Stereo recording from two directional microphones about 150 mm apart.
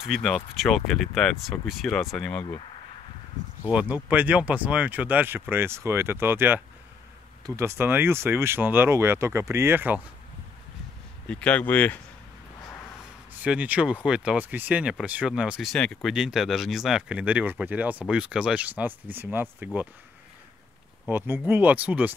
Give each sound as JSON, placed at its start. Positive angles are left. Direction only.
{"t": 0.0, "sound": "speech", "side_deg": 0}
{"t": 3.7, "sound": "speech", "side_deg": -10}
{"t": 11.2, "sound": "speech", "side_deg": 10}
{"t": 13.4, "sound": "speech", "side_deg": -10}
{"t": 21.1, "sound": "speech", "side_deg": -15}